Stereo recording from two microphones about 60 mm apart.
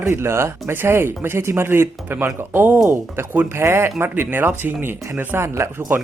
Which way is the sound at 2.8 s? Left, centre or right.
Right.